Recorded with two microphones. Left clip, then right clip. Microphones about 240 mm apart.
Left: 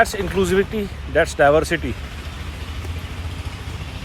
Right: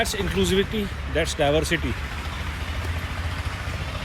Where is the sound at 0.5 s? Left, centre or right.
Left.